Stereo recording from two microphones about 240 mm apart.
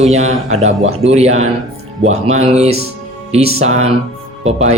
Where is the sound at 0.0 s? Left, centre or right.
Right.